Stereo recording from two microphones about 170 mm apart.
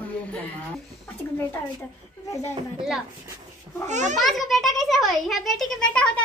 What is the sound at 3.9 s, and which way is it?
Speech, 45° right (ahead or behind).